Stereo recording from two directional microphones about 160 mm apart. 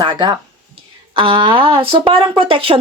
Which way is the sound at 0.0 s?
30° right (ahead or behind).